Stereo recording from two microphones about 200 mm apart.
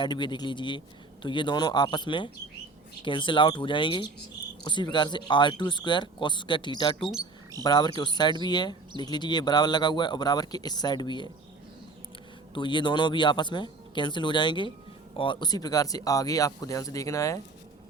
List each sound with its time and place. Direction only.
0.0 s speech: 20° left (ahead or behind)
12.5 s speech: 25° left (ahead or behind)